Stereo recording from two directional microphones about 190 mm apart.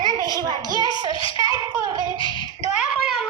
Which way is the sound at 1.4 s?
20° right (ahead or behind).